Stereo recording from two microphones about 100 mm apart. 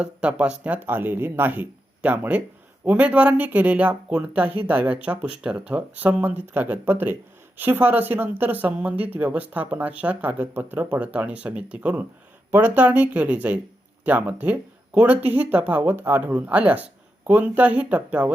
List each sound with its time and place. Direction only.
0.0 s speech: 10° right (ahead or behind)